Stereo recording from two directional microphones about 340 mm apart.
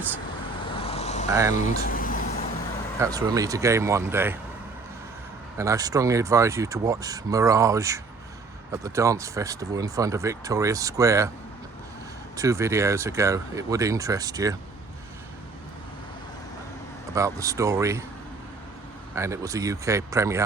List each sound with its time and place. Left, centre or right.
0.7 s vehicle: centre
1.3 s speech: centre
1.8 s a sound: left
3.0 s speech: centre
5.5 s speech: centre
12.4 s speech: centre
17.2 s speech: centre
19.1 s speech: centre